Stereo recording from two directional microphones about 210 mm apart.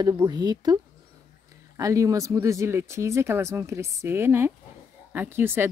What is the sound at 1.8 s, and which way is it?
Speech, 15° right (ahead or behind).